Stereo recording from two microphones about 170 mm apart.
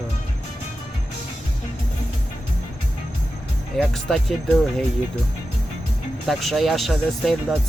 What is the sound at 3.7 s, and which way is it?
Speech, centre (ahead or behind).